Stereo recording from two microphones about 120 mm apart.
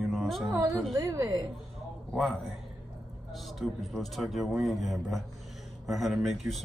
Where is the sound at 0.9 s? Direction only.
30° right (ahead or behind).